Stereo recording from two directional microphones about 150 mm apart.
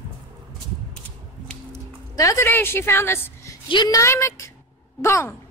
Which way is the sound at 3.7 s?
30° left (ahead or behind).